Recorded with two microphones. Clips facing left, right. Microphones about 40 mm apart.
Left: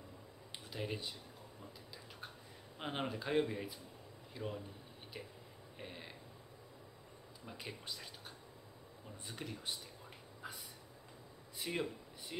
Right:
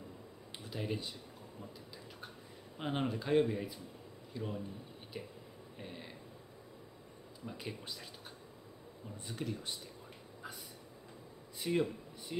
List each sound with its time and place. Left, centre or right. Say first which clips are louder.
0.7 s speech: right 3 dB; centre
2.8 s speech: right 4 dB; centre
5.8 s a sound: right 2 dB; centre
7.4 s speech: right 3 dB; centre
9.3 s speech: right 4 dB; centre
10.4 s train: right 1 dB; centre
11.6 s a sound: right 6 dB; centre